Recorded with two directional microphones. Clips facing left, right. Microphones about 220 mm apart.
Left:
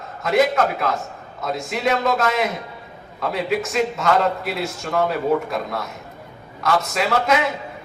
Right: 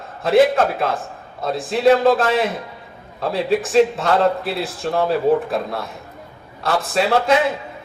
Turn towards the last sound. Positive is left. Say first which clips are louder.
# right 3 dB
turn(degrees=-30)  # may be behind; listen again after turning